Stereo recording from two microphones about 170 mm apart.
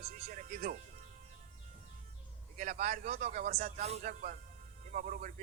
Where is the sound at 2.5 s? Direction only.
50° right (ahead or behind).